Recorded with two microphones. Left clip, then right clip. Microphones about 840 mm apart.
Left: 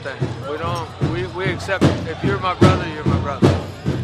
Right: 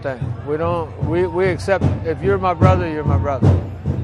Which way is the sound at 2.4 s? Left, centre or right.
Right.